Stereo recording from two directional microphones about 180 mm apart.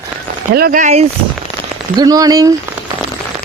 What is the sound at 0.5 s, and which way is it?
Speech, 55° right (ahead or behind).